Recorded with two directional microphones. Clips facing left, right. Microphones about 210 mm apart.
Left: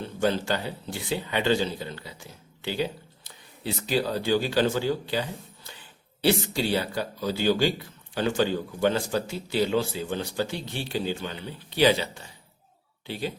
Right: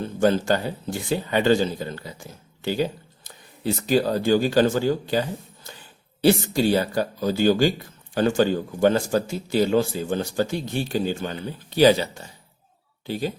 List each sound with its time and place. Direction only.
0.0 s speech: 45° right (ahead or behind)
6.2 s speech: 45° right (ahead or behind)